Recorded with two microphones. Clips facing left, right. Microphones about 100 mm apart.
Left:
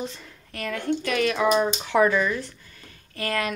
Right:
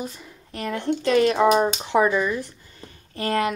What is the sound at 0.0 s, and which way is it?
Speech, 20° right (ahead or behind).